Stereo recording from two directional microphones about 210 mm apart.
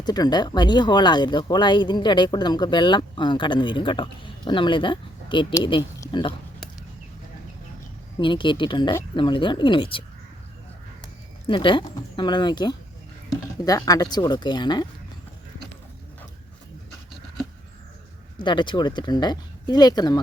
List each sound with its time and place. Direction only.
0.0 s speech: 20° left (ahead or behind)
8.2 s speech: 20° left (ahead or behind)
11.4 s speech: 25° left (ahead or behind)
18.3 s speech: 20° left (ahead or behind)